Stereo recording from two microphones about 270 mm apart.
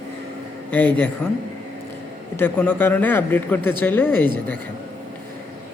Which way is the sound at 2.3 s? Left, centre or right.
Centre.